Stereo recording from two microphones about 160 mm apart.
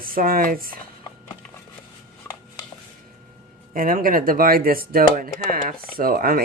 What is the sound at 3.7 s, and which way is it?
Speech, 60° right (ahead or behind).